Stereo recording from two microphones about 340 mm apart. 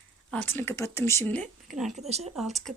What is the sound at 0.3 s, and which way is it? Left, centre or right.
Speech, centre.